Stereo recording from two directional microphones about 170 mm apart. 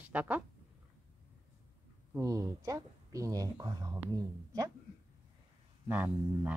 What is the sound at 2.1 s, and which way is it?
Speech, 20° right (ahead or behind).